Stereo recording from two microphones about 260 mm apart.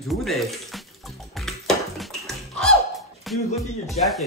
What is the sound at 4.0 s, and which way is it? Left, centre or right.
Speech, left.